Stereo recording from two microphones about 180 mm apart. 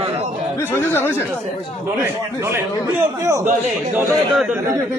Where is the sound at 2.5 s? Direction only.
15° right (ahead or behind).